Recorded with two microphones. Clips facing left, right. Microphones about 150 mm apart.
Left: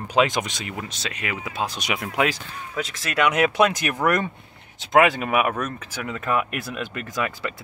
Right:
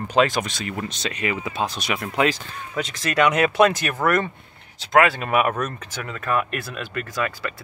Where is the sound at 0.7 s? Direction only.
5° left (ahead or behind).